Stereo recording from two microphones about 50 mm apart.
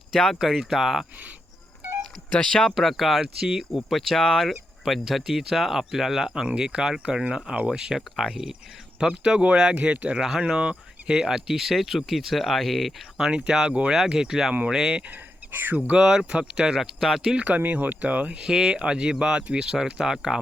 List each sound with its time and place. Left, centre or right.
0.1 s speech: centre
2.3 s speech: centre
2.8 s speech: centre
3.4 s speech: centre
3.7 s speech: centre; by 10.2 s right
10.2 s speech: centre
13.1 s speech: centre
15.5 s speech: right
16.0 s speech: centre
17.3 s speech: right
18.4 s speech: centre